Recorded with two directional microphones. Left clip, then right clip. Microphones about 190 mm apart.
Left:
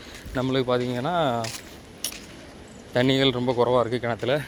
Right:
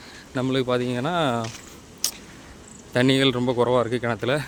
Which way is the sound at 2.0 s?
30° right (ahead or behind).